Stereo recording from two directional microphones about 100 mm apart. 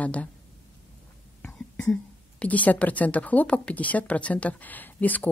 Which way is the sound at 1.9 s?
15° left (ahead or behind).